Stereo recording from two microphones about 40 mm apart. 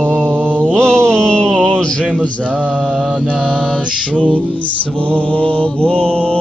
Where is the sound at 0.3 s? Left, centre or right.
Right.